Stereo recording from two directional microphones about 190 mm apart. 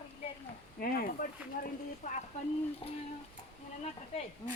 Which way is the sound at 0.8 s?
50° left (ahead or behind).